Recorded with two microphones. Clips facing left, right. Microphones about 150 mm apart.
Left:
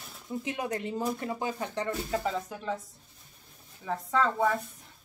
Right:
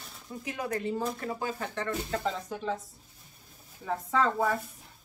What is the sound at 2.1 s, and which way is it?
Speech, 5° left (ahead or behind).